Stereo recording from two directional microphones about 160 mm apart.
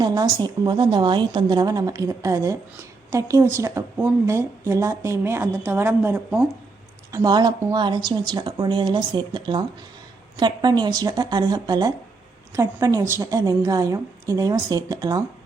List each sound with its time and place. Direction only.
0.0 s a woman's voice: 25° right (ahead or behind)
7.1 s a woman's voice: 25° right (ahead or behind)